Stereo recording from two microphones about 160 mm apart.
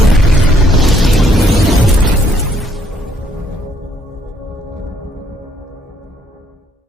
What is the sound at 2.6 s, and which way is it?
Music, centre (ahead or behind).